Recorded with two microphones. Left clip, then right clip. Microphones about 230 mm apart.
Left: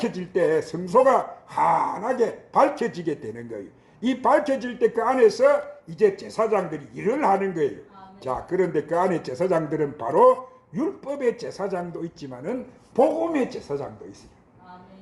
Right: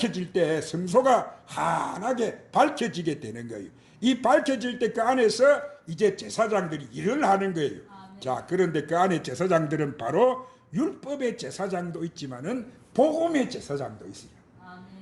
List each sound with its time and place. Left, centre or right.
0.0 s speech: right
11.4 s speech: right